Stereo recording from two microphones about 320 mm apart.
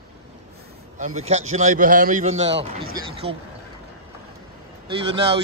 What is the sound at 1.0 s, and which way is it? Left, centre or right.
A man's voice, right.